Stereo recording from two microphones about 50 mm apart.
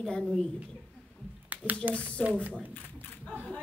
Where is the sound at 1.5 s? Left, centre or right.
Right.